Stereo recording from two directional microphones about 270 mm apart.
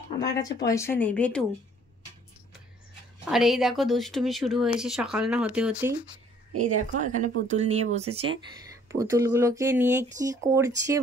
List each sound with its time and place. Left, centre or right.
0.2 s speech: centre
3.3 s speech: centre
7.0 s speech: right
8.8 s speech: centre